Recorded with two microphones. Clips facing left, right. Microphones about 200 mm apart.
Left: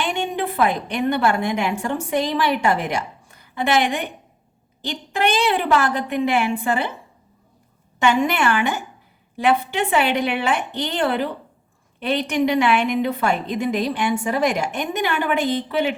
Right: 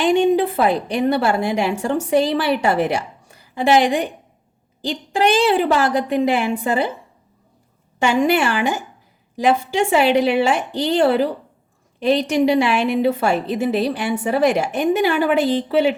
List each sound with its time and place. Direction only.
0.0 s a woman's voice: 35° right (ahead or behind)
8.0 s a woman's voice: 35° right (ahead or behind)